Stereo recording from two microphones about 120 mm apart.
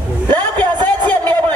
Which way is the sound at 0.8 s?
35° right (ahead or behind).